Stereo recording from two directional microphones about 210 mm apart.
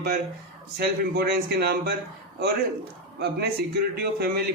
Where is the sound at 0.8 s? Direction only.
50° right (ahead or behind).